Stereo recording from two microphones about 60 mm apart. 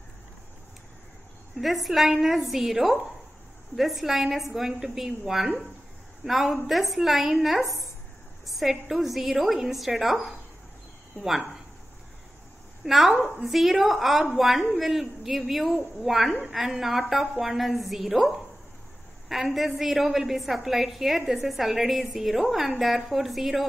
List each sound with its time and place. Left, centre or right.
1.6 s a woman's voice: centre
12.8 s a woman's voice: centre